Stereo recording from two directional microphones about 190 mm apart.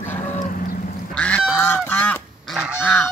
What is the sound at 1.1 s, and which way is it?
Goose, 5° left (ahead or behind).